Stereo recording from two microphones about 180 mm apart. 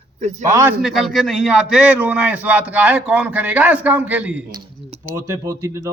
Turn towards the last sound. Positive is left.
turn(degrees=-15)  # may be behind; listen again after turning